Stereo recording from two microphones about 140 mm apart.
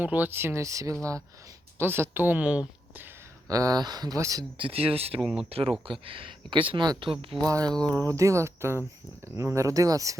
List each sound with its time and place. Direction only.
0.0 s a woman's voice: 10° right (ahead or behind)
3.5 s speech: 25° right (ahead or behind)
4.5 s speech: 40° right (ahead or behind)
5.2 s speech: 5° right (ahead or behind)
5.5 s speech: 45° right (ahead or behind)
7.4 s speech: 25° right (ahead or behind)